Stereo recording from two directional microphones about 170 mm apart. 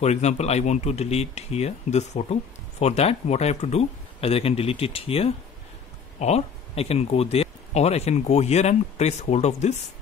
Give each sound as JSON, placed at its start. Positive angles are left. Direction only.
{"t": 0.0, "sound": "speech", "side_deg": 40}